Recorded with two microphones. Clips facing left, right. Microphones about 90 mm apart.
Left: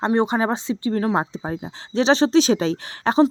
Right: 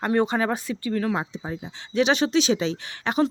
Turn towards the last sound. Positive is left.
turn(degrees=35)  # may be behind; listen again after turning